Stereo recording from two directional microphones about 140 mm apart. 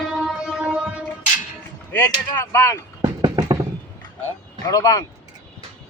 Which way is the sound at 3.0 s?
30° right (ahead or behind).